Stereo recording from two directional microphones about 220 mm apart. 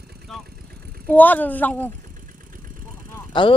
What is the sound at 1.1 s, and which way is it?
Speech, 10° left (ahead or behind).